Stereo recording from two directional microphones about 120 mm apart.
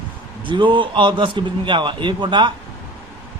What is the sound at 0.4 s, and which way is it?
A man's voice, 45° right (ahead or behind).